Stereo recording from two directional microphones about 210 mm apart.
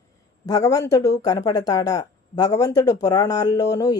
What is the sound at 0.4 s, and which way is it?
Speech, 15° left (ahead or behind).